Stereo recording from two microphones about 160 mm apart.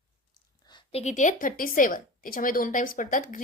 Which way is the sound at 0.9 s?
45° left (ahead or behind).